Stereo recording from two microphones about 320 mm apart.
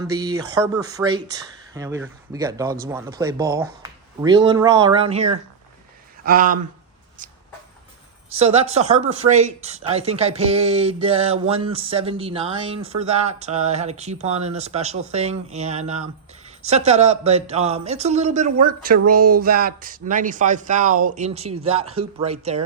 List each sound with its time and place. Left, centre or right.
0.2 s speech: centre
8.4 s speech: centre